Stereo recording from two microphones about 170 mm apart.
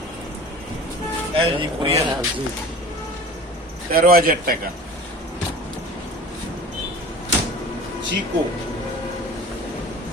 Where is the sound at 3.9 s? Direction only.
60° right (ahead or behind).